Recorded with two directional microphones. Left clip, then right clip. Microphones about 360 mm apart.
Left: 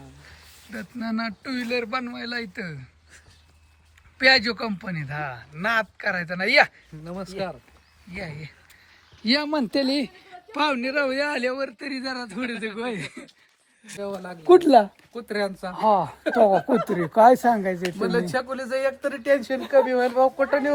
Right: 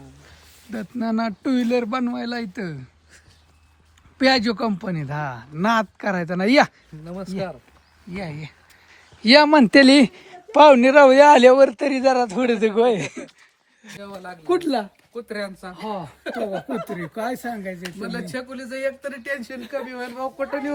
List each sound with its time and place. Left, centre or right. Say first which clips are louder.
0.0 s speech: even; centre
4.2 s speech: even; centre
9.6 s a man's voice: right 11 dB; right
11.9 s speech: right 13 dB; centre